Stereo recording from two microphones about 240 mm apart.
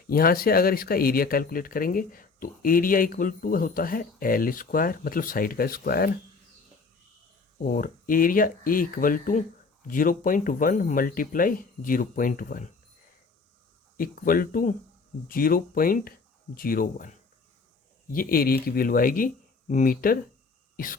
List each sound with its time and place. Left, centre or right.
0.1 s speech: left
7.6 s speech: left
13.9 s speech: left
20.7 s a sound: left